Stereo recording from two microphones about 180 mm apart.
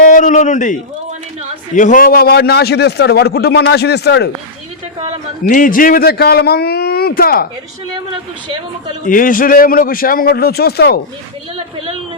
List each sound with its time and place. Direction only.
0.0 s a man's voice: 45° left (ahead or behind); by 4.3 s 65° left (ahead or behind)
5.4 s a man's voice: 50° left (ahead or behind)
9.0 s a man's voice: 50° left (ahead or behind)